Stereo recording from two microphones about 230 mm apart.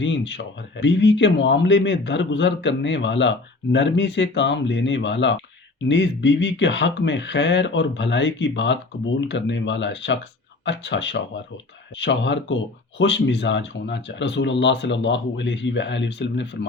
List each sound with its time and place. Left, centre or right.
0.0 s speech: left